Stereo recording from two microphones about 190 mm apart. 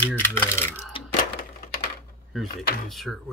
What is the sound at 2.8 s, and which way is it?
Speech, centre (ahead or behind).